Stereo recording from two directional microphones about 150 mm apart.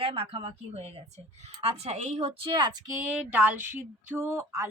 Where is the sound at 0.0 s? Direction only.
35° right (ahead or behind).